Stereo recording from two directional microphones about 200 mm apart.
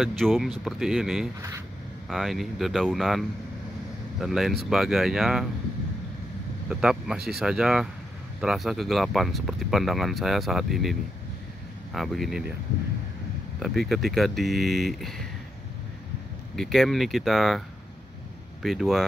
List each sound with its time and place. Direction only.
0.0 s speech: centre (ahead or behind)
6.7 s speech: centre (ahead or behind)
13.6 s speech: centre (ahead or behind)
16.5 s speech: centre (ahead or behind)